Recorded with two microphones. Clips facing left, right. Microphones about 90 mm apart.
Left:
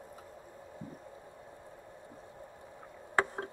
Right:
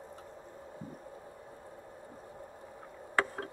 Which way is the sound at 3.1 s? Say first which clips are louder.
Left 1 dB; 25° left (ahead or behind).